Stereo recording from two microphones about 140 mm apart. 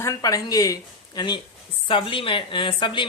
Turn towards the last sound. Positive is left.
turn(degrees=35)  # may be behind; listen again after turning